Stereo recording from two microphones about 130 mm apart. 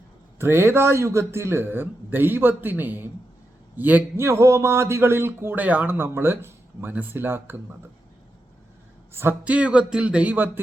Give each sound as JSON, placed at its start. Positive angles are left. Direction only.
{"t": 0.3, "sound": "a man's voice", "side_deg": -20}
{"t": 9.1, "sound": "a man's voice", "side_deg": -15}